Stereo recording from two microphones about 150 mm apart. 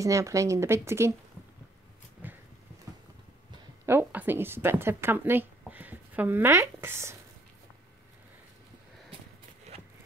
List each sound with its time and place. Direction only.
0.0 s speech: 20° right (ahead or behind)
2.2 s a sound: 10° right (ahead or behind)
3.8 s a woman's voice: 15° right (ahead or behind)